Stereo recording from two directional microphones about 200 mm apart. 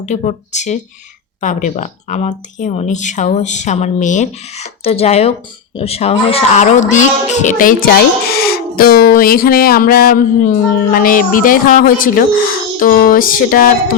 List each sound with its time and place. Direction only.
0.0 s speech: 35° left (ahead or behind)